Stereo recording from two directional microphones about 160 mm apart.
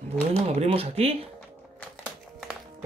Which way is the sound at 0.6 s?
40° right (ahead or behind).